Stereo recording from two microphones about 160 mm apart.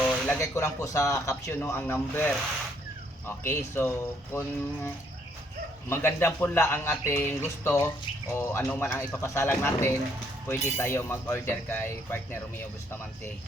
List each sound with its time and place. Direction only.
0.0 s speech: 10° left (ahead or behind)
5.9 s speech: 15° left (ahead or behind)